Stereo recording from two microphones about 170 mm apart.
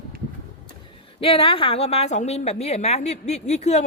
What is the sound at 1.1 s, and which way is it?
A woman's voice, 35° left (ahead or behind).